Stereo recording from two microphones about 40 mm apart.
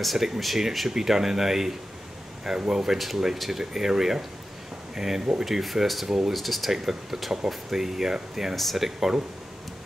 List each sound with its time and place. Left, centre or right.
0.0 s speech: centre
8.5 s speech: centre